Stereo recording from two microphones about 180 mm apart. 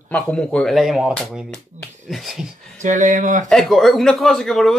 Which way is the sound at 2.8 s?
45° right (ahead or behind).